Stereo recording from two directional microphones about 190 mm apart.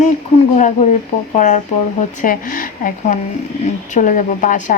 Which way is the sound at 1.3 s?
40° left (ahead or behind).